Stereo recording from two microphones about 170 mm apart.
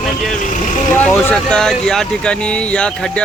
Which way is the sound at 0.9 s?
10° left (ahead or behind).